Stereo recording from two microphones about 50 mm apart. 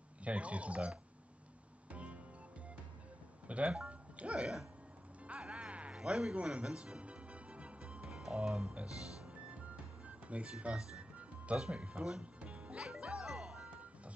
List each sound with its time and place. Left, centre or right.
0.2 s speech: right
1.9 s music: right
3.4 s speech: right
5.2 s music: right
5.9 s music: centre
8.5 s speech: right
9.3 s music: right
11.7 s speech: right
12.8 s music: right
13.7 s music: right